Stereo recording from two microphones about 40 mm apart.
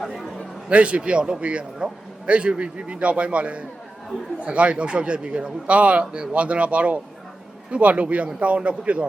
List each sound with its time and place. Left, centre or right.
0.7 s a man's voice: right